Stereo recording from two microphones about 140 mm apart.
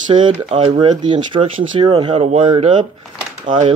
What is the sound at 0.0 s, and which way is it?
Speech, 35° right (ahead or behind).